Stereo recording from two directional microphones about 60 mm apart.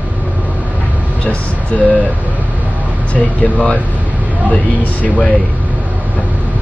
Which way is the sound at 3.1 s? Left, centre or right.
Left.